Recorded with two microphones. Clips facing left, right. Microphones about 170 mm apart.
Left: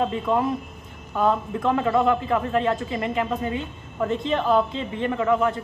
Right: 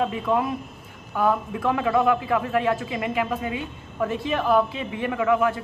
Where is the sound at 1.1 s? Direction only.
20° left (ahead or behind).